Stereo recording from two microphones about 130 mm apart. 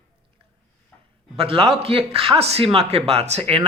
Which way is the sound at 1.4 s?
50° right (ahead or behind).